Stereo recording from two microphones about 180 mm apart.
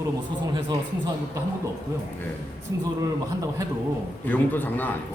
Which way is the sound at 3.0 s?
20° right (ahead or behind).